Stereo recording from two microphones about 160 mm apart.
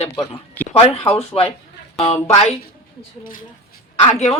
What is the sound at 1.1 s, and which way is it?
Speech, 35° left (ahead or behind).